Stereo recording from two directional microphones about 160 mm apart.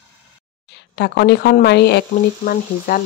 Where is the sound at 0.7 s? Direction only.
90° left.